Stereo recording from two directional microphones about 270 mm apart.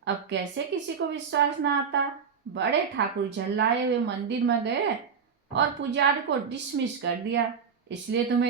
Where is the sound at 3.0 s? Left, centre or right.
Right.